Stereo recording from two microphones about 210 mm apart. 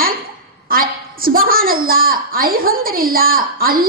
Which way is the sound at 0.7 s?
45° right (ahead or behind).